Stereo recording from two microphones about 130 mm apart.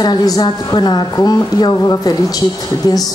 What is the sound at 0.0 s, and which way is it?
A woman's voice, 30° left (ahead or behind).